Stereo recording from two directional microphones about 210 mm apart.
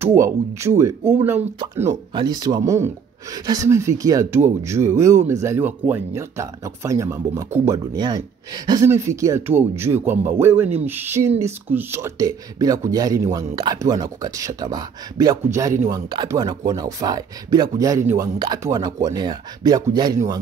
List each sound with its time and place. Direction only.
0.0 s speech: 15° right (ahead or behind)